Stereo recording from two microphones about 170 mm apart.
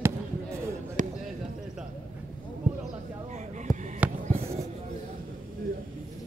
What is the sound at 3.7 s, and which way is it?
Basketball bounce, 20° left (ahead or behind).